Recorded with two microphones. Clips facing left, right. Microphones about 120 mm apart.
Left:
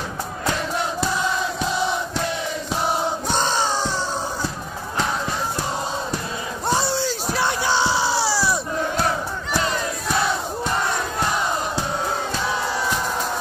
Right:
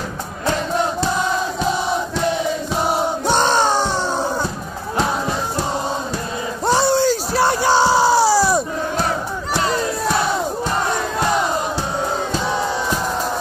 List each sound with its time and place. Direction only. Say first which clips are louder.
3.3 s music: right 8 dB; 65° right (ahead or behind)
6.6 s a sound: right 5 dB; 90° right
6.9 s crowd: right 7 dB; 50° right (ahead or behind)